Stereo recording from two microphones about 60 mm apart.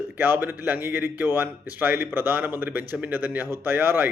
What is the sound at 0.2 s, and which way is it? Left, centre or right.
A man's voice, right.